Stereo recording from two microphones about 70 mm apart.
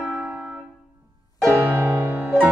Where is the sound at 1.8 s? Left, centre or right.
Right.